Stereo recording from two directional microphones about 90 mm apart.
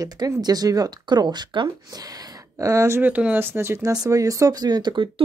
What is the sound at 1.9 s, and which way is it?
Speech, 45° right (ahead or behind).